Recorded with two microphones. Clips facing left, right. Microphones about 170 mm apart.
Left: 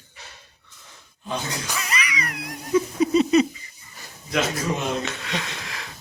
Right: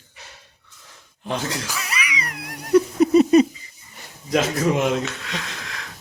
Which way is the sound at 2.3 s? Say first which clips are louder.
Right 6 dB; 60° right (ahead or behind).